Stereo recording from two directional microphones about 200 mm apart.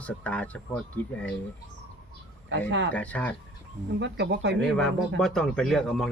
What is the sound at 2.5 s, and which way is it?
Speech, 60° right (ahead or behind).